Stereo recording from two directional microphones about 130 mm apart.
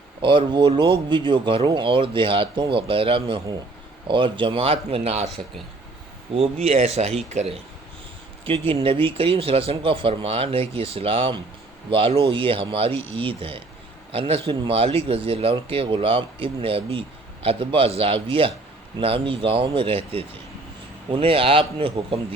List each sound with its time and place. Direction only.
0.2 s speech: 40° right (ahead or behind); by 5.3 s 55° right (ahead or behind)
6.3 s speech: 50° right (ahead or behind)
8.4 s speech: 45° right (ahead or behind)